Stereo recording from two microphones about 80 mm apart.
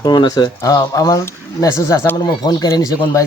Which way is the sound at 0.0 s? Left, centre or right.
Left.